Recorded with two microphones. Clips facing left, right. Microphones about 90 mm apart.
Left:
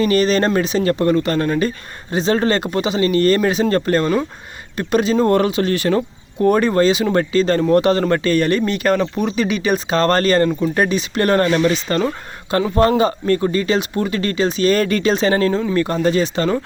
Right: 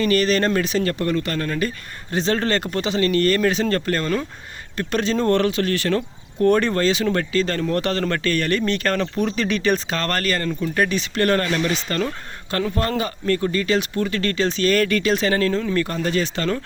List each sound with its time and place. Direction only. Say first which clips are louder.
0.0 s speech: left 3 dB; 20° left (ahead or behind)
2.1 s speech: left 4 dB; 15° left (ahead or behind)
4.8 s speech: left 5 dB; 15° left (ahead or behind)